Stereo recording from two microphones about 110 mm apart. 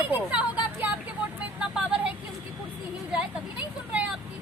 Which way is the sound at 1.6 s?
10° right (ahead or behind).